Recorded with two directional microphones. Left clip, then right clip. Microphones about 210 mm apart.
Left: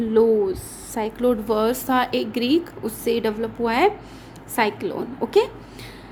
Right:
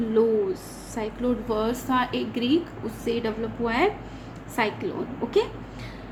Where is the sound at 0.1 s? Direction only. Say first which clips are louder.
Left 5 dB; 40° left (ahead or behind).